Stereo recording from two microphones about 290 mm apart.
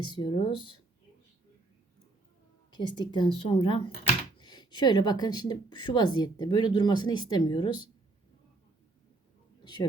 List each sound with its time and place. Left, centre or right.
0.1 s speech: centre
2.7 s speech: centre